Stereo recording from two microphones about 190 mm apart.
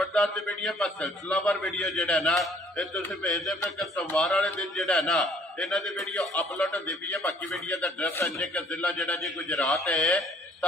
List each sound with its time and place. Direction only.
0.0 s a man's voice: 5° left (ahead or behind)